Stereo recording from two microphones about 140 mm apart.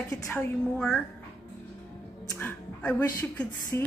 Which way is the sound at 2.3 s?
15° left (ahead or behind).